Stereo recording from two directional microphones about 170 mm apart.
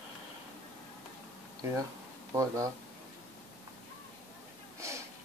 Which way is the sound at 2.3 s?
20° right (ahead or behind).